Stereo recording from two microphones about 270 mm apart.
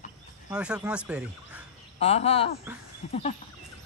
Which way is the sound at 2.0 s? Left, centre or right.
Left.